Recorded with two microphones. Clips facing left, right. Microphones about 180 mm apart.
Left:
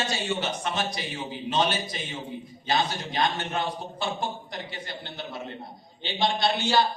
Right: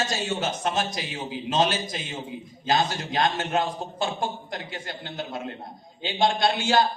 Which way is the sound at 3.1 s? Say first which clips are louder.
Right 4 dB; 45° right (ahead or behind).